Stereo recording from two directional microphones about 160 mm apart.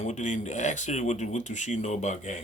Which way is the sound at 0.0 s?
50° left (ahead or behind).